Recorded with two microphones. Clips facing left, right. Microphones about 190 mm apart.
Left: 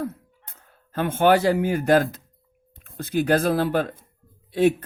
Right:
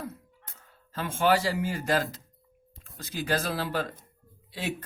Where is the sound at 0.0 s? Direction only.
60° left (ahead or behind).